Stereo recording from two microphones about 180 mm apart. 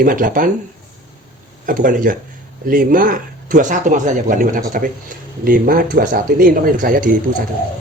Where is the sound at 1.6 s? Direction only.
45° right (ahead or behind).